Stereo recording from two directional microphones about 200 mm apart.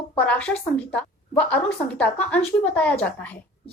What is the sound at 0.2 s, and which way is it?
A woman's voice, 5° left (ahead or behind).